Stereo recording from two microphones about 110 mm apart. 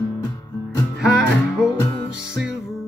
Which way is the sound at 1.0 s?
5° right (ahead or behind).